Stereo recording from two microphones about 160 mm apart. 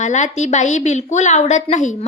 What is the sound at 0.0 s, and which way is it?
A woman's voice, 45° left (ahead or behind).